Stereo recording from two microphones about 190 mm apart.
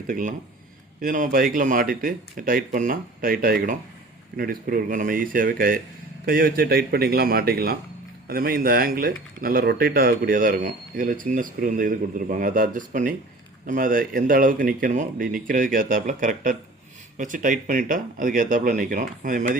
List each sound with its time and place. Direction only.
0.1 s speech: 45° right (ahead or behind)